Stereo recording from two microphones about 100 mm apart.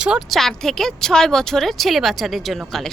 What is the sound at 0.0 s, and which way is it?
Speech, 10° right (ahead or behind).